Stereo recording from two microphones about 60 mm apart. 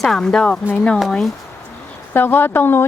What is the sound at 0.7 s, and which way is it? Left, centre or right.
Speech, left.